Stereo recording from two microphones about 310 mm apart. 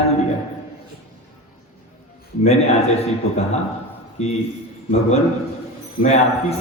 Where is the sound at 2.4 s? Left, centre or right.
Centre.